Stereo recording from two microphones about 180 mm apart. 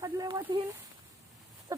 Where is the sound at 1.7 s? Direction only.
20° right (ahead or behind).